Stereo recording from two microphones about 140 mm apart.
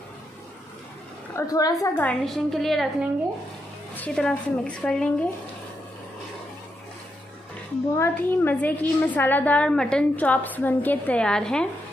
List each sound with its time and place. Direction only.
1.3 s a woman's voice: 25° left (ahead or behind)
2.0 s a woman's voice: 5° left (ahead or behind)
7.9 s a woman's voice: 15° left (ahead or behind)